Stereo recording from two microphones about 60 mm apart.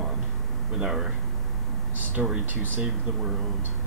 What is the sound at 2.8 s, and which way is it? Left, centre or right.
Speech, centre.